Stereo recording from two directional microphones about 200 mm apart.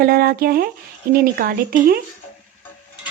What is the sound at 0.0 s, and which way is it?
A woman's voice, 50° right (ahead or behind).